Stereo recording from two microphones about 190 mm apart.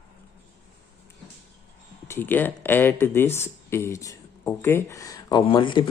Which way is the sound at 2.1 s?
10° left (ahead or behind).